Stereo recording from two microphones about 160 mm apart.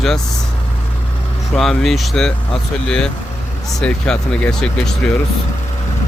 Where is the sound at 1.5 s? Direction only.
Centre (ahead or behind).